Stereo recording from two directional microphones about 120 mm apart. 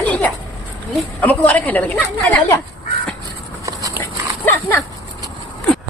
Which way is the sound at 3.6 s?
25° right (ahead or behind).